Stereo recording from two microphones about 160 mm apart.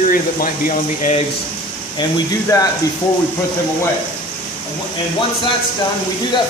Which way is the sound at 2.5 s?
20° left (ahead or behind).